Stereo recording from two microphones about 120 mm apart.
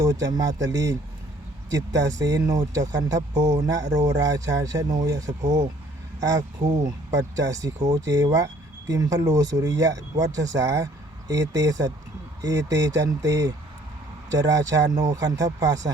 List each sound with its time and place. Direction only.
0.0 s speech: 30° right (ahead or behind)
7.1 s speech: 30° right (ahead or behind)